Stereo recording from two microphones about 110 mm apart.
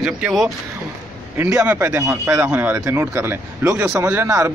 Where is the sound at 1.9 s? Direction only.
25° right (ahead or behind).